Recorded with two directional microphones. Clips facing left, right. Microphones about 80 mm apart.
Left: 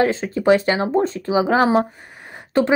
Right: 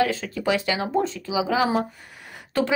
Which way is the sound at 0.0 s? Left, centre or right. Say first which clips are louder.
Left 5 dB; left.